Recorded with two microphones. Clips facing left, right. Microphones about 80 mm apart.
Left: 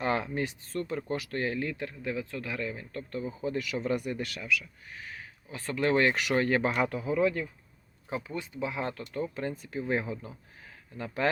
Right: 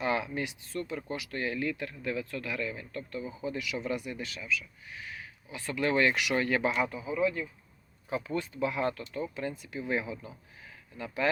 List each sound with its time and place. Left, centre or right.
0.0 s speech: left
4.9 s speech: left
8.3 s speech: centre
9.3 s speech: left